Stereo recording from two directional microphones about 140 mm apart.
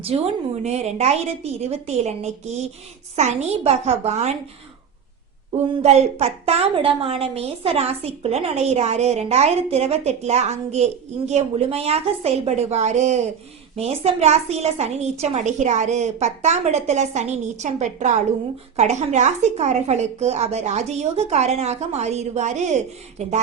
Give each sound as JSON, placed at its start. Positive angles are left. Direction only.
{"t": 0.0, "sound": "a woman's voice", "side_deg": -45}
{"t": 5.8, "sound": "a woman's voice", "side_deg": -50}